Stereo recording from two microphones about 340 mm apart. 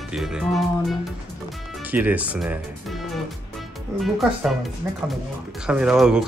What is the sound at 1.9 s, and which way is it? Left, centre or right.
Speech, centre.